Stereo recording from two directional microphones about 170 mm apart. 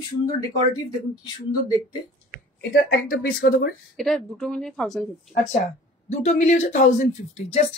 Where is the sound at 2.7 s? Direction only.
65° left (ahead or behind).